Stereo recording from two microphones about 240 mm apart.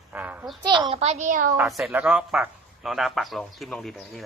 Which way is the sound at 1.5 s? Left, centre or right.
Centre.